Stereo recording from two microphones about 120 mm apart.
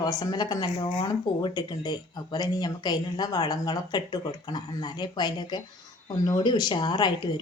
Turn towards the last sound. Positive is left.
turn(degrees=35)  # may be behind; listen again after turning